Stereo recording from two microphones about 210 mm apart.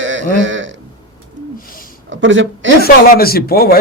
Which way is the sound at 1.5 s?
40° left (ahead or behind).